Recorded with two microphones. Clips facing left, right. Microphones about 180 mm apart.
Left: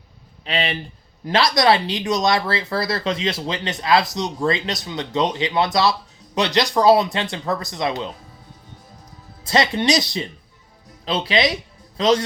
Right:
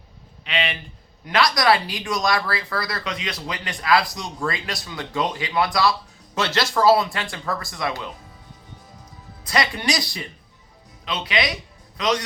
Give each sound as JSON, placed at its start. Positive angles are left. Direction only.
{"t": 0.4, "sound": "speech", "side_deg": 35}
{"t": 9.4, "sound": "speech", "side_deg": 25}